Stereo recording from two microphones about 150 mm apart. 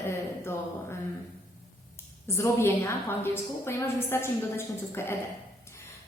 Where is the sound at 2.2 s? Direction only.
15° left (ahead or behind).